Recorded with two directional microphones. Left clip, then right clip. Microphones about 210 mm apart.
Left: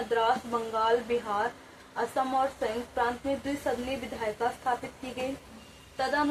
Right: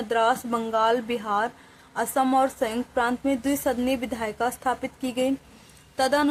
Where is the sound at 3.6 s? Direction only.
60° right (ahead or behind).